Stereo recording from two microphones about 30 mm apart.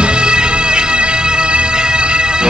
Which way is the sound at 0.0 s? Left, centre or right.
Right.